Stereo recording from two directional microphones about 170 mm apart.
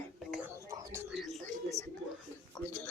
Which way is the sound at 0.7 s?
20° right (ahead or behind).